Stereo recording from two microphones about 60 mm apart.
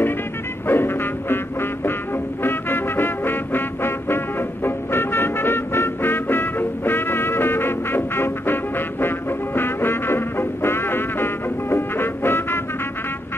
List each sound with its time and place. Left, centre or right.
0.7 s music: left